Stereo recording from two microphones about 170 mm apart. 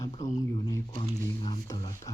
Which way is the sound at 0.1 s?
45° left (ahead or behind).